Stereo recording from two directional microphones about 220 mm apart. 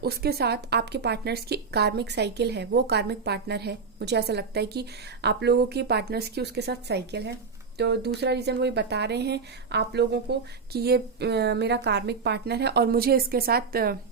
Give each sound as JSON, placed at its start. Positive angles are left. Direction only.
{"t": 0.0, "sound": "speech", "side_deg": -45}